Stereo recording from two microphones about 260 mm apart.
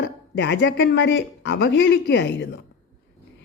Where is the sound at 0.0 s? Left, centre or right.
Left.